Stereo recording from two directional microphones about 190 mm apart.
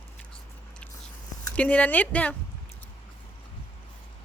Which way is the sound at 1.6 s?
5° left (ahead or behind).